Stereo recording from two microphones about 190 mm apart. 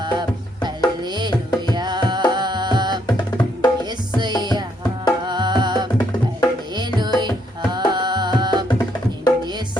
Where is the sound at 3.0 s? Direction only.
20° left (ahead or behind).